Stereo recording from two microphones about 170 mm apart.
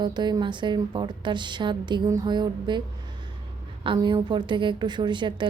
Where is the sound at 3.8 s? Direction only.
30° right (ahead or behind).